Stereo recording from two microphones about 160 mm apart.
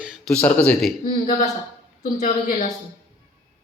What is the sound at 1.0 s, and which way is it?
A woman's voice, 50° left (ahead or behind).